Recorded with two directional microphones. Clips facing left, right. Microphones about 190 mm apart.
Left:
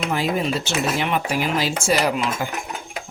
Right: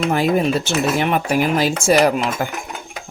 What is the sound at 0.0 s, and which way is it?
Speech, 50° right (ahead or behind).